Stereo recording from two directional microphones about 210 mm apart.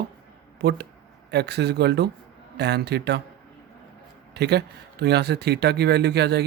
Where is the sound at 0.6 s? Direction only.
50° right (ahead or behind).